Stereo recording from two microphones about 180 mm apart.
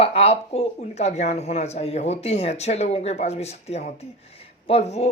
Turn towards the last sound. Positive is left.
turn(degrees=35)  # may be behind; listen again after turning